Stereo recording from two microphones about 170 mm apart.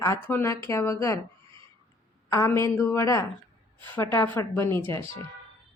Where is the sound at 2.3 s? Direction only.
15° left (ahead or behind).